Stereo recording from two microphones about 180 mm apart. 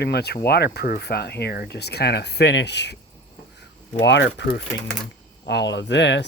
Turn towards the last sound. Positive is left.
turn(degrees=75)  # may be behind; listen again after turning